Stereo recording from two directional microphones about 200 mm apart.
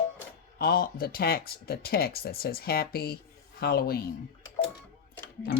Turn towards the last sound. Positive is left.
turn(degrees=55)  # may be behind; listen again after turning